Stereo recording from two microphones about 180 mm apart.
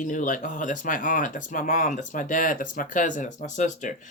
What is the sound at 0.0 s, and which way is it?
Speech, 45° left (ahead or behind).